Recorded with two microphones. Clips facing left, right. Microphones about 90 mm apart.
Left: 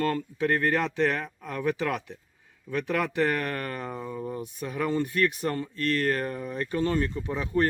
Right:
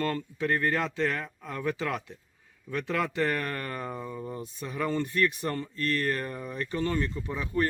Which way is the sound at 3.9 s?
10° left (ahead or behind).